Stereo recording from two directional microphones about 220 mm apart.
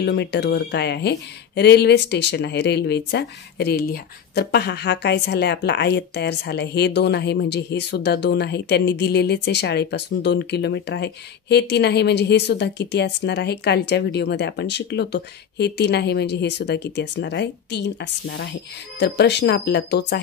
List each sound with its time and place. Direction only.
0.0 s speech: 50° left (ahead or behind)